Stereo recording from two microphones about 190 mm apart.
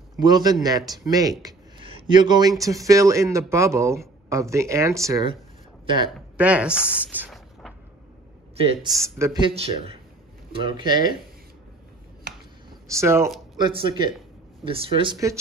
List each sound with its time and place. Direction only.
0.2 s speech: 20° right (ahead or behind)
6.1 s a sound: 5° right (ahead or behind)
8.5 s speech: 30° right (ahead or behind)
8.9 s speech: 15° right (ahead or behind)
13.0 s speech: 15° right (ahead or behind)
13.6 s speech: 25° right (ahead or behind)